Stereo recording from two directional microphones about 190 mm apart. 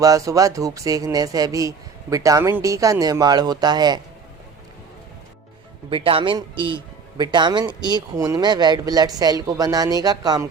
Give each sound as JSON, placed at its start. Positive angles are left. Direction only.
{"t": 0.0, "sound": "speech", "side_deg": -15}
{"t": 5.9, "sound": "speech", "side_deg": -30}